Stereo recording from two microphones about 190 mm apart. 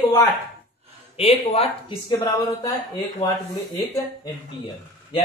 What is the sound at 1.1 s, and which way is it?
Speech, 30° left (ahead or behind).